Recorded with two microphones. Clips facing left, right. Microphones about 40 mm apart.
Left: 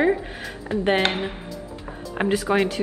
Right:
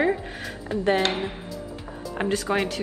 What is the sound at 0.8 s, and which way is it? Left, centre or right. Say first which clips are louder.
Speech: left 1 dB; left.